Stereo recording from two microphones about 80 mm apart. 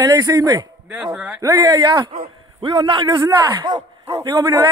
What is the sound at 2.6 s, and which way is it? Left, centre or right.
Speech, right.